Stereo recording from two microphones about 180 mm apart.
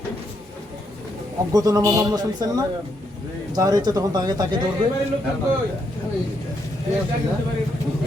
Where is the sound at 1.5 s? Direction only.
20° right (ahead or behind).